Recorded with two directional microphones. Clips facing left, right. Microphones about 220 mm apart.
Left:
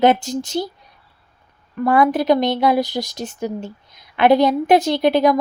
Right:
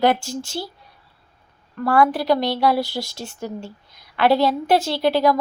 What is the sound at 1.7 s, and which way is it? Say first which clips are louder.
A woman's voice: left 2 dB; 20° left (ahead or behind).